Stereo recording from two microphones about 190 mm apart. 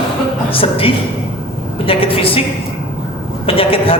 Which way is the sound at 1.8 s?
30° left (ahead or behind).